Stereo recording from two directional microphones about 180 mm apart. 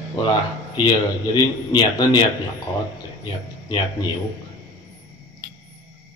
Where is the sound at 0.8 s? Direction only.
25° left (ahead or behind).